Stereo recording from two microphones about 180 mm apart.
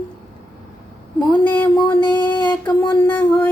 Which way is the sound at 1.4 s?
10° left (ahead or behind).